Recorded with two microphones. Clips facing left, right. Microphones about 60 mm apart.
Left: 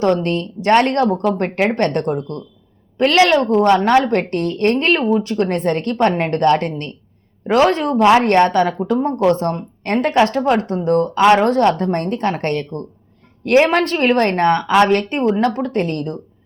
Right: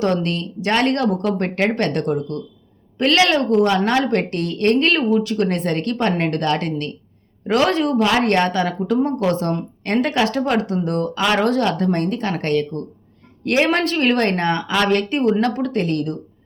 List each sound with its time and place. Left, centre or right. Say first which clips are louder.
0.0 s a woman's voice: left 3 dB; left
8.8 s a woman's voice: left 2 dB; left
14.7 s a woman's voice: left 4 dB; left